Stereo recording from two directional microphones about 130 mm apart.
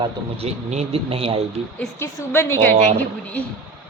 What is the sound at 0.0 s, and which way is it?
Speech, 50° right (ahead or behind).